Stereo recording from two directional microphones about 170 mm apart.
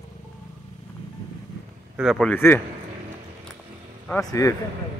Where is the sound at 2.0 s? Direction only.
Centre (ahead or behind).